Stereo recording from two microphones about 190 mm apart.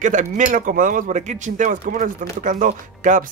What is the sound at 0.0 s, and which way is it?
Speech, 40° right (ahead or behind).